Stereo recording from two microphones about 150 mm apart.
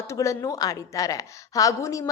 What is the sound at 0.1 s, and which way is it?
A woman's voice, 20° left (ahead or behind).